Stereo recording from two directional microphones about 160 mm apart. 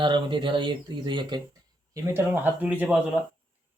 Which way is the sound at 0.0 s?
30° right (ahead or behind).